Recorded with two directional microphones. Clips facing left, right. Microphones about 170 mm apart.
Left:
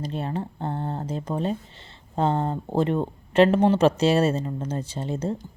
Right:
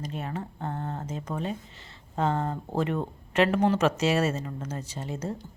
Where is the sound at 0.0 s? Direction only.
30° left (ahead or behind).